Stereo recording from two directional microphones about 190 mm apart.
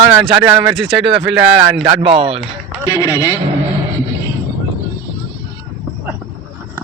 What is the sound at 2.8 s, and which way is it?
Speech, 15° right (ahead or behind).